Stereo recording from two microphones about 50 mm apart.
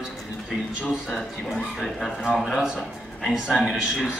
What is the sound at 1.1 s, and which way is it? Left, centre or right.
A man's voice, centre.